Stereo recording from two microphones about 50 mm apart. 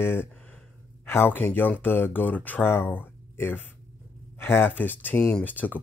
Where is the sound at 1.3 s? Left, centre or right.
Left.